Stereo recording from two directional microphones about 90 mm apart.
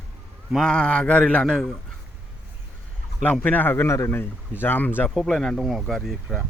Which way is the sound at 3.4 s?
20° left (ahead or behind).